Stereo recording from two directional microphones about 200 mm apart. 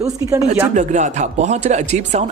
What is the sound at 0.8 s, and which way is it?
Speech, 35° right (ahead or behind).